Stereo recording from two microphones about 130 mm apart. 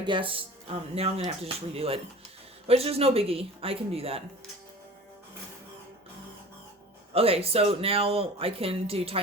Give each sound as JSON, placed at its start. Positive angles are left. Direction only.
{"t": 0.0, "sound": "speech", "side_deg": -40}
{"t": 7.1, "sound": "speech", "side_deg": -50}